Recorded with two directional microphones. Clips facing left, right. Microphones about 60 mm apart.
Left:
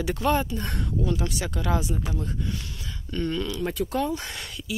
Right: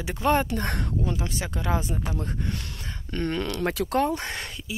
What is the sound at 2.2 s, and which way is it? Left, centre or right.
Speech, right.